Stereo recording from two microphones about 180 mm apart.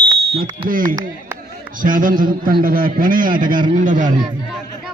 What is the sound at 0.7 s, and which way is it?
A man's voice, 50° right (ahead or behind).